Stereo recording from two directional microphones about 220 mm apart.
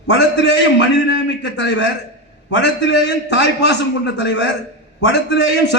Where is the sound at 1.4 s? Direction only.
55° left (ahead or behind).